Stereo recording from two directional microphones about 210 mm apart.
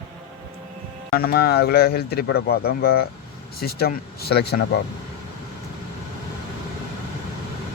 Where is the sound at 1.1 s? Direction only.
45° left (ahead or behind).